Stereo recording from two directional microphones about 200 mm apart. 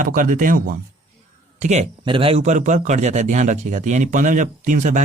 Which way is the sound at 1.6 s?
35° right (ahead or behind).